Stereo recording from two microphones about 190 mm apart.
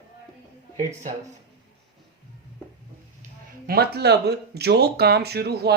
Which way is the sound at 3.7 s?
55° right (ahead or behind).